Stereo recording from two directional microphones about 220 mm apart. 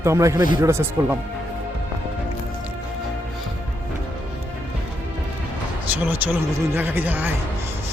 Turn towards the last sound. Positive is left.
turn(degrees=-10)  # may be behind; listen again after turning